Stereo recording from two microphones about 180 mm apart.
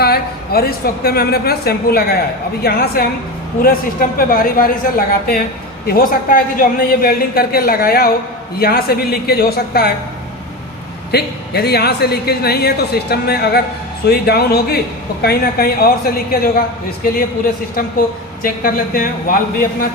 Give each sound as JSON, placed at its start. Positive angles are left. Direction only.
{"t": 0.0, "sound": "a woman's voice", "side_deg": 60}
{"t": 11.1, "sound": "a woman's voice", "side_deg": 65}
{"t": 18.4, "sound": "a woman's voice", "side_deg": 50}